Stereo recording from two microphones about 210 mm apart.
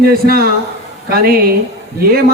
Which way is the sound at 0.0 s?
45° right (ahead or behind).